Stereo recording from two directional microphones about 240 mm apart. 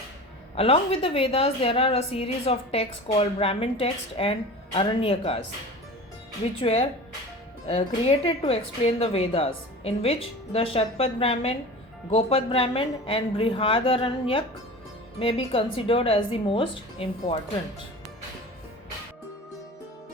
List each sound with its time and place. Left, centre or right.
0.5 s a woman's voice: left
6.6 s a woman's voice: left